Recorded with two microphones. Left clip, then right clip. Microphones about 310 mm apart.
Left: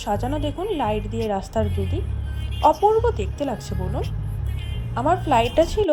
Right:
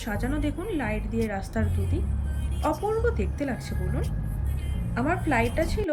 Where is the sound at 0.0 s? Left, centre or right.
Centre.